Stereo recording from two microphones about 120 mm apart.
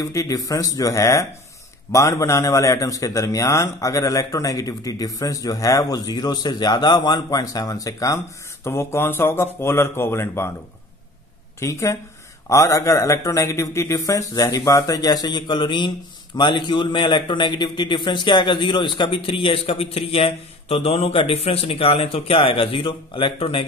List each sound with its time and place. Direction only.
0.0 s a man's voice: 25° left (ahead or behind)
11.6 s a man's voice: 25° left (ahead or behind); by 23.6 s 50° left (ahead or behind)